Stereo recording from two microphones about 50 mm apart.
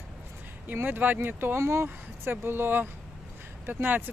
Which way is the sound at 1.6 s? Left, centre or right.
Right.